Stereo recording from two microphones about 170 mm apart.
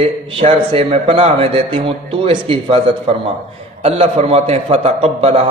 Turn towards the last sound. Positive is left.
turn(degrees=-35)  # may be behind; listen again after turning